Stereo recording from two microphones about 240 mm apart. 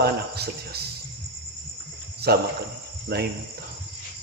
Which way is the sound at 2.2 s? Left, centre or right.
Right.